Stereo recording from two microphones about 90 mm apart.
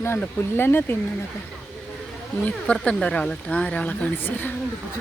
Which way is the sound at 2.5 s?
10° left (ahead or behind).